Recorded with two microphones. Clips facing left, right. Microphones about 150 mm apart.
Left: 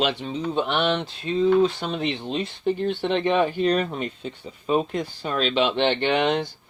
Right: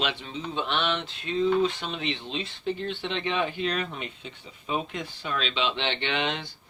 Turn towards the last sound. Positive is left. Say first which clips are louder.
# left 8 dB
turn(degrees=45)  # may be behind; listen again after turning